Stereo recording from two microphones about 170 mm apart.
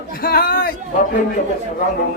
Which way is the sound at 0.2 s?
60° left (ahead or behind).